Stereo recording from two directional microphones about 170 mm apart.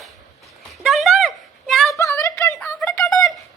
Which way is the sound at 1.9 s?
20° left (ahead or behind).